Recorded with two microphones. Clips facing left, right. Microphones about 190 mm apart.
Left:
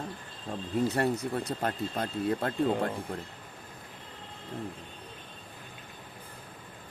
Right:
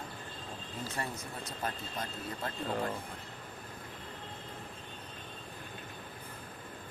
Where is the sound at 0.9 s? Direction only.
65° left (ahead or behind).